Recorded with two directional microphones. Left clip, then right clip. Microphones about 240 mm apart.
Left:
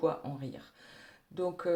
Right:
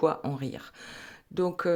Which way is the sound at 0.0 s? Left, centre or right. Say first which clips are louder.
Right 6 dB; right.